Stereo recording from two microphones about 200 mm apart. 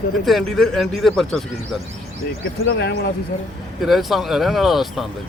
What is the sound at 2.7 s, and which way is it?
Speech, 55° left (ahead or behind).